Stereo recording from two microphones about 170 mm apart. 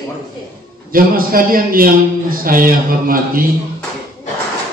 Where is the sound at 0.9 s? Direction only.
55° right (ahead or behind).